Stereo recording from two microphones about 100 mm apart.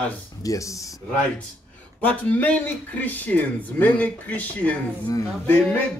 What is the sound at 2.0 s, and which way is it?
Speech, 15° left (ahead or behind).